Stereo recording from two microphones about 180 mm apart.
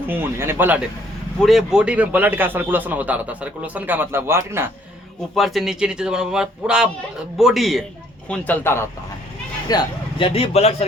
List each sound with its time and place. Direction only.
0.1 s a man's voice: 10° right (ahead or behind)
5.3 s a man's voice: centre (ahead or behind)
9.6 s speech: 25° left (ahead or behind)